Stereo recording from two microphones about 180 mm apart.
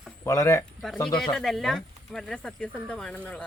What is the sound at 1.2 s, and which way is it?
Speech, centre (ahead or behind).